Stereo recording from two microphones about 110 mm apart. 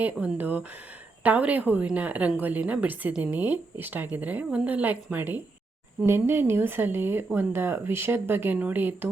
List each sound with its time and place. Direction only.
0.0 s a woman's voice: 15° right (ahead or behind)